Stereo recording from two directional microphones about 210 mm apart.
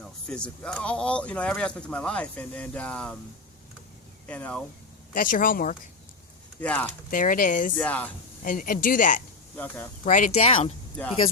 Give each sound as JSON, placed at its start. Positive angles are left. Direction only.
{"t": 0.0, "sound": "speech", "side_deg": 5}
{"t": 4.3, "sound": "speech", "side_deg": 5}
{"t": 5.1, "sound": "speech", "side_deg": 40}
{"t": 6.6, "sound": "speech", "side_deg": 10}
{"t": 7.1, "sound": "speech", "side_deg": 40}
{"t": 7.8, "sound": "speech", "side_deg": 5}
{"t": 8.4, "sound": "speech", "side_deg": 40}
{"t": 9.6, "sound": "speech", "side_deg": 10}
{"t": 10.0, "sound": "speech", "side_deg": 40}